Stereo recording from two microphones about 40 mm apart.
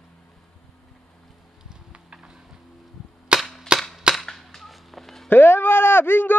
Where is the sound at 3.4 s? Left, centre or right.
Centre.